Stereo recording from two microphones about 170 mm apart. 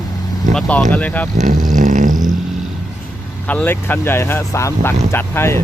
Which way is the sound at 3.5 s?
10° left (ahead or behind).